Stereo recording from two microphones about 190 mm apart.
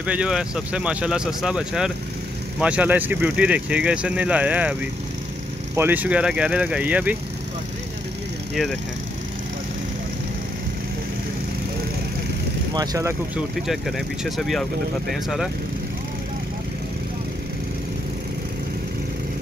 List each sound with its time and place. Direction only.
0.0 s speech: 5° right (ahead or behind)
5.8 s speech: 10° right (ahead or behind)
12.7 s speech: 20° right (ahead or behind)
13.6 s speech: centre (ahead or behind)